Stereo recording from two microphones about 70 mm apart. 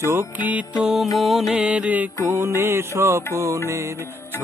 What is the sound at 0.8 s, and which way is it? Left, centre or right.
Music, centre.